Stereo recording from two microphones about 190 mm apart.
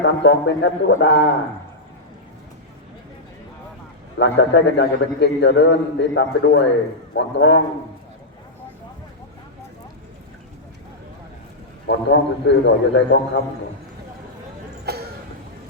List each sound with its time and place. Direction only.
0.0 s a man's voice: 70° left (ahead or behind)
4.2 s a man's voice: 70° left (ahead or behind)
11.9 s a man's voice: 65° left (ahead or behind)